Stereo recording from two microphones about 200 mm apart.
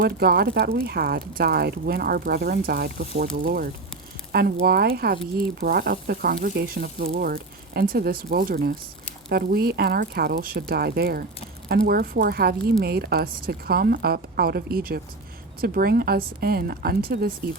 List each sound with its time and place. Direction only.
0.0 s speech: 50° right (ahead or behind)